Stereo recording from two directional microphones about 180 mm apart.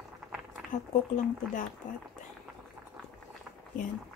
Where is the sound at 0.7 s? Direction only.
45° left (ahead or behind).